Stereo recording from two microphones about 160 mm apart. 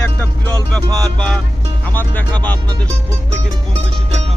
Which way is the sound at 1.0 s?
5° left (ahead or behind).